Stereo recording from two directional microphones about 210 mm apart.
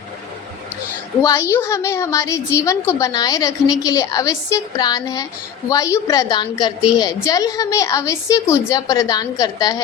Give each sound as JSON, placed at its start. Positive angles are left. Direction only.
{"t": 1.2, "sound": "a woman's voice", "side_deg": 15}